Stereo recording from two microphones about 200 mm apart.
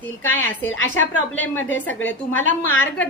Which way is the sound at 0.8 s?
90° left.